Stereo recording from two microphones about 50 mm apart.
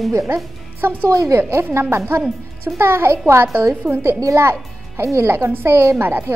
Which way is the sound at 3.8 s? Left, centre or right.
Centre.